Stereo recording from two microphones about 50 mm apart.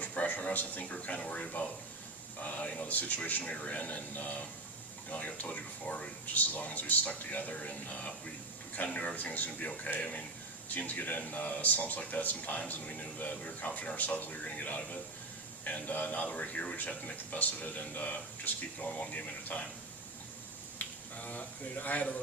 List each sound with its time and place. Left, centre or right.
0.0 s a man's voice: left
20.7 s speech: left